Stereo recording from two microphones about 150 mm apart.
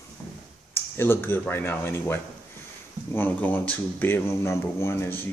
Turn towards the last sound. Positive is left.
turn(degrees=15)  # may be behind; listen again after turning